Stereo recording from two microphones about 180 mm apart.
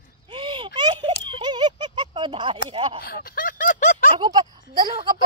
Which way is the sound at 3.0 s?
55° left (ahead or behind).